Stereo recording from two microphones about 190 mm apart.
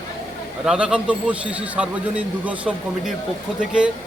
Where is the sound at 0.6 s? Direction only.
5° right (ahead or behind).